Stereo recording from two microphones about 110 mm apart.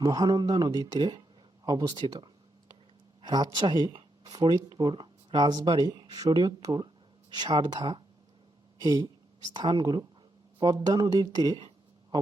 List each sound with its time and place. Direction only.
0.0 s speech: 35° right (ahead or behind)